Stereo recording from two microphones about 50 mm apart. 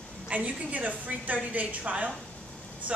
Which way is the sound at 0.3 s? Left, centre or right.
Right.